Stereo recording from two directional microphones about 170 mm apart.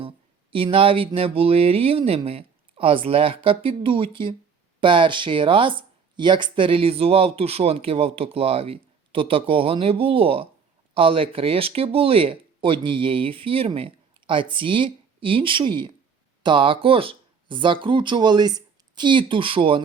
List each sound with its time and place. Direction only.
0.5 s speech: 30° right (ahead or behind)